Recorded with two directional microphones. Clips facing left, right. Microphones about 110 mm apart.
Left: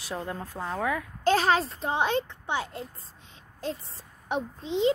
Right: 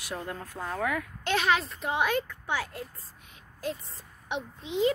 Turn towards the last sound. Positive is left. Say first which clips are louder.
# left 2 dB
turn(degrees=30)  # may be behind; listen again after turning